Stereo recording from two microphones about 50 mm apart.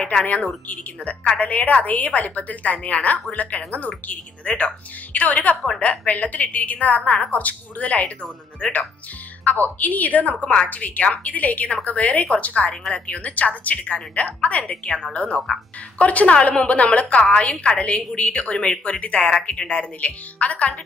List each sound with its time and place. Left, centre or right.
0.1 s a woman's voice: left
1.5 s a woman's voice: left
9.4 s a woman's voice: left